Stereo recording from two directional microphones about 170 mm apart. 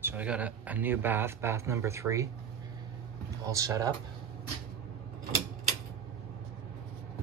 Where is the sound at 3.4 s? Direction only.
20° right (ahead or behind).